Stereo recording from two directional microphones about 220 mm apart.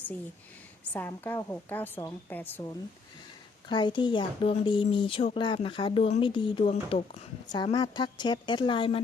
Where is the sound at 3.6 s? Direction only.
20° left (ahead or behind).